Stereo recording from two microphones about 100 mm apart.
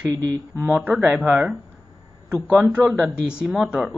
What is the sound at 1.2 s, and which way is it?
Speech, centre (ahead or behind).